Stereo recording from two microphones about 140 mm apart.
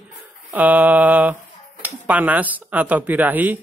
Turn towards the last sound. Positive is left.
turn(degrees=-10)  # may be behind; listen again after turning